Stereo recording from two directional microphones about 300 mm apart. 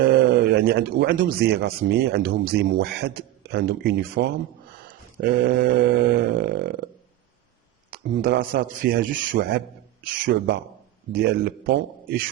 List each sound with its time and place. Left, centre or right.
0.1 s speech: right
7.9 s a man's voice: right